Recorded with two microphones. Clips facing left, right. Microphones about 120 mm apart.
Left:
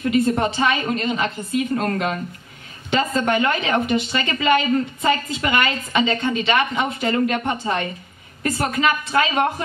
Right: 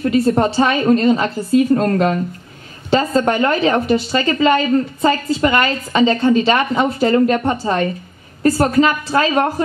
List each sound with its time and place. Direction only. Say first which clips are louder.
0.0 s a woman's voice: right 4 dB; 35° right (ahead or behind)